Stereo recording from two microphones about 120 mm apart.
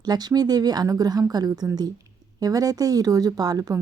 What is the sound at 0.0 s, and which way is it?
Speech, 35° right (ahead or behind).